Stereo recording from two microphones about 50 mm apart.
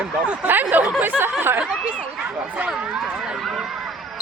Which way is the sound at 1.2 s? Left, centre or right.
Right.